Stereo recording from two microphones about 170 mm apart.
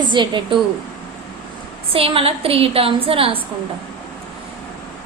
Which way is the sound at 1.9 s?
35° right (ahead or behind).